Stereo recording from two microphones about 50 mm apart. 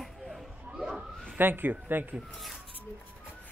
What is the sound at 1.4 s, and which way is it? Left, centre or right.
Speech, right.